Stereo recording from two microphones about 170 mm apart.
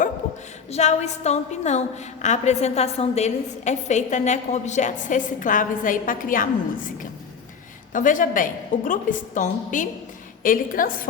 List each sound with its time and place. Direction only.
0.7 s a woman's voice: 40° left (ahead or behind)